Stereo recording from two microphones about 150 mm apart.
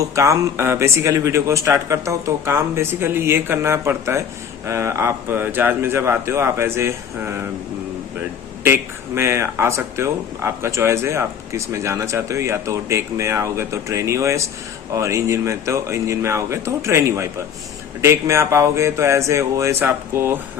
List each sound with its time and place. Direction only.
0.0 s speech: 20° right (ahead or behind)
8.6 s speech: 15° right (ahead or behind)